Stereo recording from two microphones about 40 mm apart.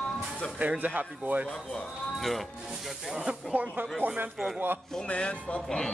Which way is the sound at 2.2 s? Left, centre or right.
Centre.